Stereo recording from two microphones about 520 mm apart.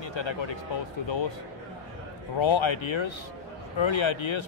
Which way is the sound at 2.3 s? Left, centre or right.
Left.